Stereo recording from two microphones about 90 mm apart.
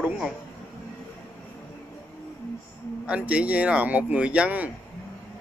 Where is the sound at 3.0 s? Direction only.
15° right (ahead or behind).